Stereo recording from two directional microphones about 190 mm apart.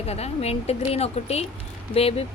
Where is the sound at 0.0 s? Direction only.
35° left (ahead or behind).